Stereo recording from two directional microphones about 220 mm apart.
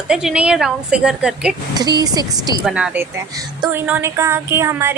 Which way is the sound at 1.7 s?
15° right (ahead or behind).